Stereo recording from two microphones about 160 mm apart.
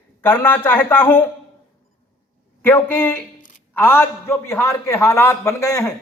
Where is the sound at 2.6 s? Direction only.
10° left (ahead or behind).